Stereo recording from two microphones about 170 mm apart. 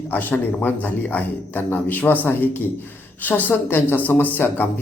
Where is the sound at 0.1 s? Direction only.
10° left (ahead or behind).